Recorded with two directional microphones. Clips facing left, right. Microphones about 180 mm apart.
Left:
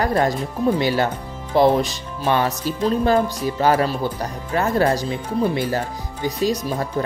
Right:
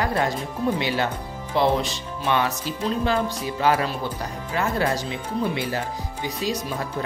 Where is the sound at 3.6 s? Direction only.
40° left (ahead or behind).